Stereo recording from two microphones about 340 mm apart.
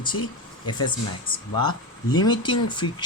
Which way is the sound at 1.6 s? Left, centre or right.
Left.